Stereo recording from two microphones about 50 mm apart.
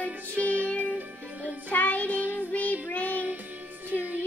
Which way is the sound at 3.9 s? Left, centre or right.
Right.